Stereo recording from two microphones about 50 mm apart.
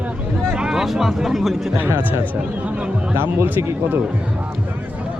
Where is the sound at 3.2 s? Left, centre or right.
Right.